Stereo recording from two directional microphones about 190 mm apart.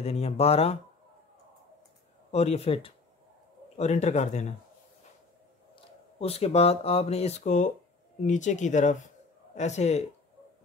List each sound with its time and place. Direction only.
0.0 s speech: 35° left (ahead or behind)
2.3 s speech: 35° left (ahead or behind)
6.1 s speech: 30° left (ahead or behind)